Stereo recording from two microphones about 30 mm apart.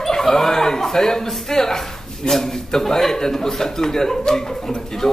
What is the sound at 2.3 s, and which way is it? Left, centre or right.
Speech, centre.